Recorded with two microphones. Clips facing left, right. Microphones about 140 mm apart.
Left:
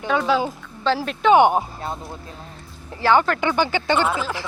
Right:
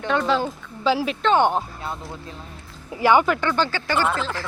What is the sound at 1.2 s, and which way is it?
Speech, 10° left (ahead or behind).